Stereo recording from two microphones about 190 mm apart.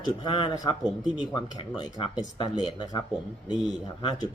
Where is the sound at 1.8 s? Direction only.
25° left (ahead or behind).